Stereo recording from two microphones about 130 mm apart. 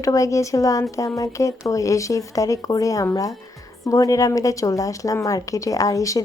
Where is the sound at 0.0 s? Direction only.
25° left (ahead or behind).